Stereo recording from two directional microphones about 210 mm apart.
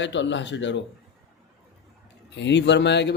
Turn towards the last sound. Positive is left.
turn(degrees=55)  # may be behind; listen again after turning